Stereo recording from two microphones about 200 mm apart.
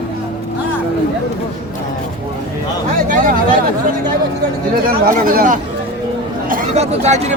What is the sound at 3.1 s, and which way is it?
Speech, 40° right (ahead or behind).